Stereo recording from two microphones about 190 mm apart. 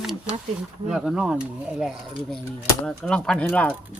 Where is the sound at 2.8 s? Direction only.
5° left (ahead or behind).